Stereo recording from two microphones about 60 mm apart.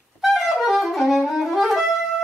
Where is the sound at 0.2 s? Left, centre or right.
Centre.